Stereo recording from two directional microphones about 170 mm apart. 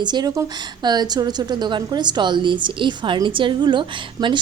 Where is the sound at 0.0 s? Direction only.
25° right (ahead or behind).